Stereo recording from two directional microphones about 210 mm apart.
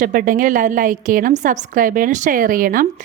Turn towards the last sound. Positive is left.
turn(degrees=-40)  # may be behind; listen again after turning